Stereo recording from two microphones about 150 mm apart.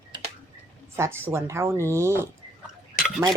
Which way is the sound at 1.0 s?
15° right (ahead or behind).